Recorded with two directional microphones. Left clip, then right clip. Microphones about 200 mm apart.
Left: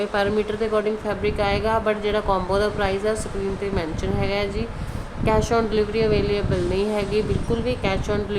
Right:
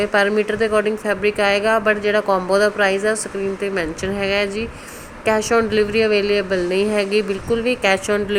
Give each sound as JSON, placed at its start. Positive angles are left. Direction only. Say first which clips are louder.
{"t": 0.0, "sound": "a woman's voice", "louder": "right 5 dB", "side_deg": -20}